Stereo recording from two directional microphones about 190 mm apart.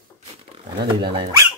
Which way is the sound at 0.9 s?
25° right (ahead or behind).